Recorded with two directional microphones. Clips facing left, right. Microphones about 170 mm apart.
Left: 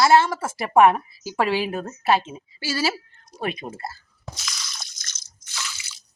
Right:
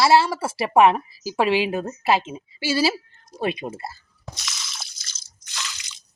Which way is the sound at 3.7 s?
5° right (ahead or behind).